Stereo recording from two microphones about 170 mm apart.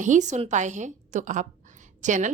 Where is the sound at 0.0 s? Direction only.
45° right (ahead or behind).